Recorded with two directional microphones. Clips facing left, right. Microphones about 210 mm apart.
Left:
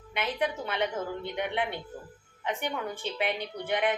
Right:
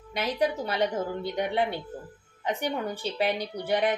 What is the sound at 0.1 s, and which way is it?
A woman's voice, 35° right (ahead or behind).